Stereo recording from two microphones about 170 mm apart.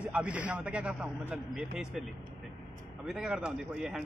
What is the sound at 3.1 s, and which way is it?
Speech, 5° right (ahead or behind).